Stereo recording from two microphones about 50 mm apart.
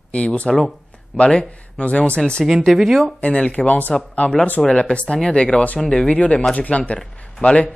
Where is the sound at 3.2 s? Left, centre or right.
Left.